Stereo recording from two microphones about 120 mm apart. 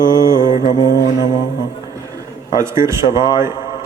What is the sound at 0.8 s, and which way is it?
Music, 30° left (ahead or behind).